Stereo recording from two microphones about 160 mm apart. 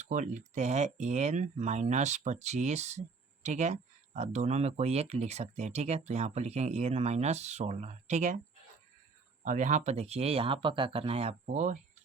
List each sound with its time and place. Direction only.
0.0 s speech: 50° right (ahead or behind)
9.4 s speech: 50° right (ahead or behind)